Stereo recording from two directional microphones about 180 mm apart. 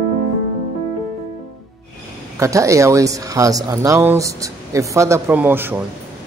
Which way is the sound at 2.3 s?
15° right (ahead or behind).